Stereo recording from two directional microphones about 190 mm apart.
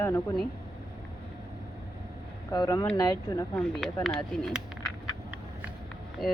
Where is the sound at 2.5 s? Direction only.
20° left (ahead or behind).